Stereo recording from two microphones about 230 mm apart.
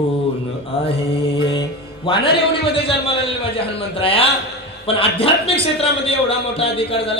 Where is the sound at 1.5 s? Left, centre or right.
Left.